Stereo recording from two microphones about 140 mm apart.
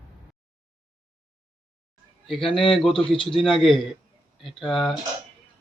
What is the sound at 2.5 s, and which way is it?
Speech, 40° left (ahead or behind).